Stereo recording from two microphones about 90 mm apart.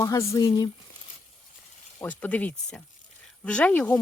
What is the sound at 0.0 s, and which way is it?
Speech, 35° left (ahead or behind).